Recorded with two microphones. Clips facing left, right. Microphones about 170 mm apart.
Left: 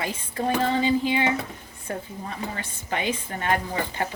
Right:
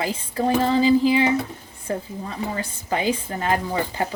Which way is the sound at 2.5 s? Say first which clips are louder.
Right 4 dB; 35° right (ahead or behind).